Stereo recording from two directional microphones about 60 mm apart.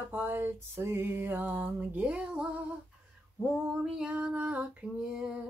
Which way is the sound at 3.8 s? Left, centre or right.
Centre.